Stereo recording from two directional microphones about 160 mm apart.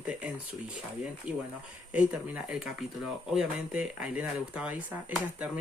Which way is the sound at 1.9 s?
10° right (ahead or behind).